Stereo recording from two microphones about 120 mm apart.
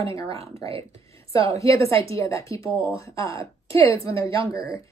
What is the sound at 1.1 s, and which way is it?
A woman's voice, 25° left (ahead or behind).